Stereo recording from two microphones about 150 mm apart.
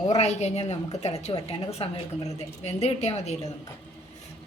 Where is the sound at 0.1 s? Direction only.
45° left (ahead or behind).